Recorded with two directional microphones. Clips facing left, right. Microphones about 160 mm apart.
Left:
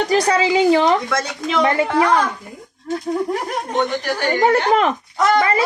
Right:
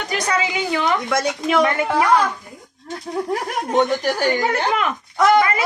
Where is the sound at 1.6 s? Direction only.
30° left (ahead or behind).